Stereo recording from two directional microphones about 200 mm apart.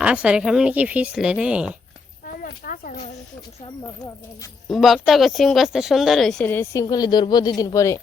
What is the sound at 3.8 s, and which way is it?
Speech, 15° left (ahead or behind).